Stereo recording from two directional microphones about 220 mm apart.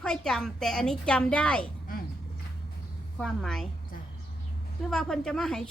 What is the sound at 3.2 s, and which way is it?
Speech, 5° left (ahead or behind).